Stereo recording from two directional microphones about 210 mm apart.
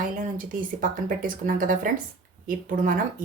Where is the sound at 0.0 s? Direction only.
40° right (ahead or behind).